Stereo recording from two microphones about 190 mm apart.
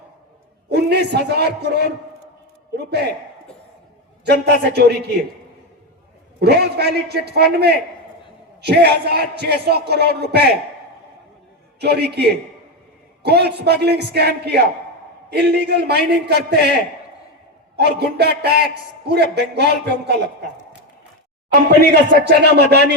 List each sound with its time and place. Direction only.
0.7 s a man's voice: 60° right (ahead or behind)
4.3 s a man's voice: 60° right (ahead or behind)
6.4 s a man's voice: 60° right (ahead or behind)
11.8 s a man's voice: 60° right (ahead or behind)
17.7 s a man's voice: 60° right (ahead or behind)
21.9 s a man's voice: 60° right (ahead or behind)